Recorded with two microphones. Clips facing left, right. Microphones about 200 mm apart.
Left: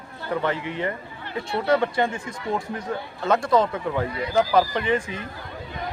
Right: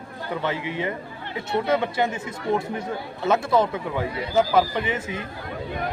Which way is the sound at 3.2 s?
5° right (ahead or behind).